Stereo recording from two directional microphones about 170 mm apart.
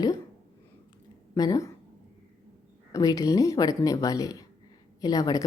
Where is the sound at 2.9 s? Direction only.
20° left (ahead or behind).